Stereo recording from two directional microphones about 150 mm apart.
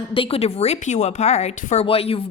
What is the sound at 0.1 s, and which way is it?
A woman's voice, 40° left (ahead or behind).